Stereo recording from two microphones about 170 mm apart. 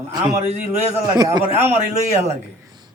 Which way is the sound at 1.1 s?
20° right (ahead or behind).